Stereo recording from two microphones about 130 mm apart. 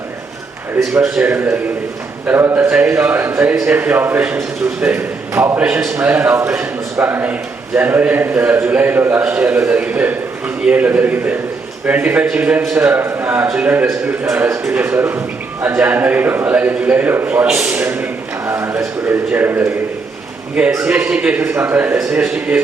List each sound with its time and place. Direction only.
1.0 s a man's voice: 15° right (ahead or behind)
20.8 s a man's voice: 10° right (ahead or behind)